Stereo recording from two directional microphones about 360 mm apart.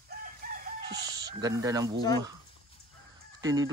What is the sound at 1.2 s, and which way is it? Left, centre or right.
Speech, centre.